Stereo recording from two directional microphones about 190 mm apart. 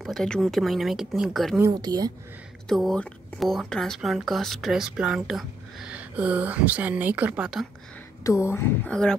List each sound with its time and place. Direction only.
0.0 s speech: centre (ahead or behind)
1.6 s a woman's voice: 20° right (ahead or behind)
2.7 s speech: centre (ahead or behind)
8.2 s speech: 15° left (ahead or behind)